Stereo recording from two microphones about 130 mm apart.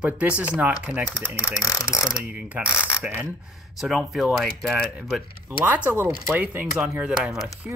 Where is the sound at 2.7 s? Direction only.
15° left (ahead or behind).